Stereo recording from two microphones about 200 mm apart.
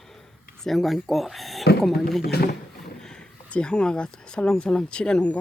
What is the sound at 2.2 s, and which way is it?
Speech, 50° left (ahead or behind).